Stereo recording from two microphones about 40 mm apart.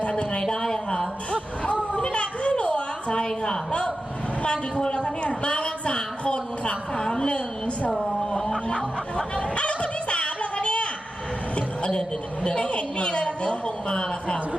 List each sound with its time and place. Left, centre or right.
0.0 s a sound: left
0.5 s a woman's voice: centre
1.9 s a sound: left
3.2 s a woman's voice: centre
3.7 s a man's voice: left
7.0 s a woman's voice: centre
7.3 s a woman's voice: left
8.3 s a sound: centre
8.6 s snicker: left
12.4 s a woman's voice: left